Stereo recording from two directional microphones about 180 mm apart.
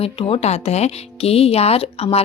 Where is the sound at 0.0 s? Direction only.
30° left (ahead or behind).